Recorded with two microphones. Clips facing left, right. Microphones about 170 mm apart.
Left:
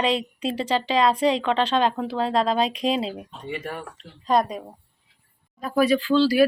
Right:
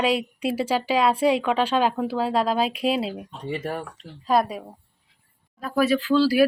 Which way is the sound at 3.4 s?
35° right (ahead or behind).